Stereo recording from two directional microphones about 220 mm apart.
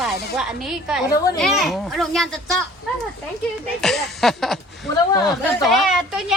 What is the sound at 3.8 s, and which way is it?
Speech, centre (ahead or behind).